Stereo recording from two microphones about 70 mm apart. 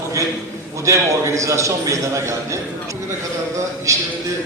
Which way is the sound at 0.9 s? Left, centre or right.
Right.